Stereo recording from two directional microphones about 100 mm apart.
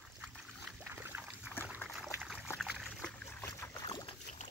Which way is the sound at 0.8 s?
20° right (ahead or behind).